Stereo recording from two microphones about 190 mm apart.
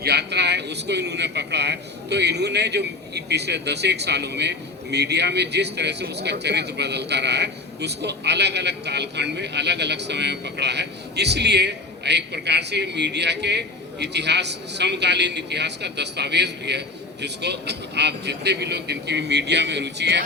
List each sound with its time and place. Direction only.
0.0 s a man's voice: 60° right (ahead or behind)